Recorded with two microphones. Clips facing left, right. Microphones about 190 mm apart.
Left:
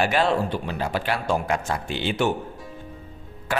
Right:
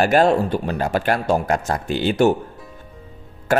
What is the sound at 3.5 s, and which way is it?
Speech, 45° right (ahead or behind).